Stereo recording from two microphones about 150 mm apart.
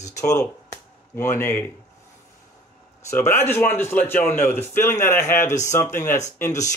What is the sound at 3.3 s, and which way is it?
A man's voice, 15° left (ahead or behind).